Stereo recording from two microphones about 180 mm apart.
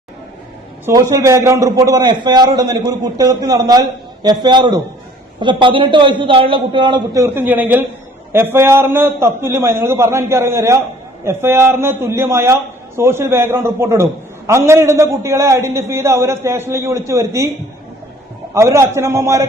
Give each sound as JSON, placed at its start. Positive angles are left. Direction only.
{"t": 1.1, "sound": "a man's voice", "side_deg": -15}
{"t": 18.5, "sound": "a man's voice", "side_deg": -15}